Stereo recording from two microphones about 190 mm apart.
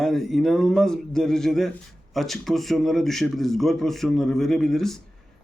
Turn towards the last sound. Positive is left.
turn(degrees=0)  # may be behind; listen again after turning